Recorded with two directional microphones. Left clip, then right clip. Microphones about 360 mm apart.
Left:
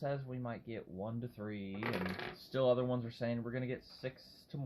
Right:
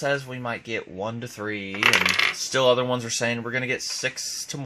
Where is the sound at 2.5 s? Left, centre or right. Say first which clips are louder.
Right 10 dB; right.